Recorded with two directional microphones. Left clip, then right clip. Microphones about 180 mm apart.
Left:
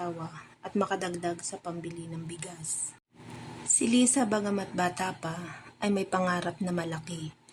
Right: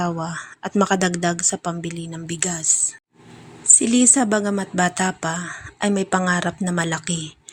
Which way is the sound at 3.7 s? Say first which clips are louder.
Right 10 dB; 25° right (ahead or behind).